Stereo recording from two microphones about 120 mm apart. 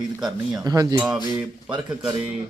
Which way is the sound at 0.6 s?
35° right (ahead or behind).